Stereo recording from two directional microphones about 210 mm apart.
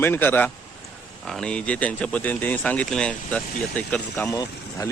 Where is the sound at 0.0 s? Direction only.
10° left (ahead or behind).